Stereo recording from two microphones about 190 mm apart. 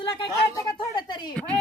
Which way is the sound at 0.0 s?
30° left (ahead or behind).